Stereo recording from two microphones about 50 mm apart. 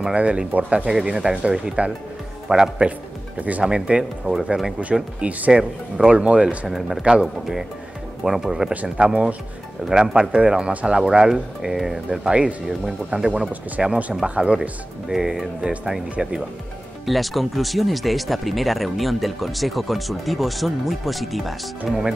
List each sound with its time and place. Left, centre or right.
0.1 s speech: right
0.8 s speech: centre
3.3 s speech: right
3.6 s speech: centre
4.9 s speech: centre
6.0 s speech: right
10.7 s speech: right
11.0 s speech: centre
12.3 s speech: right
14.2 s speech: right
15.0 s speech: centre
17.0 s speech: centre